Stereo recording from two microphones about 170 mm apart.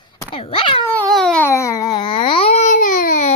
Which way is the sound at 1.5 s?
15° left (ahead or behind).